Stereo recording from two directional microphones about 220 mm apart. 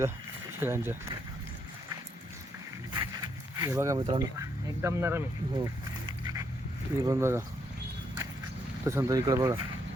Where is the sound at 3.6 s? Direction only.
15° right (ahead or behind).